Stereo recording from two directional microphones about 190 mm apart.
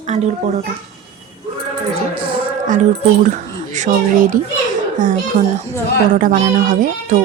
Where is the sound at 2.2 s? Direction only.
30° right (ahead or behind).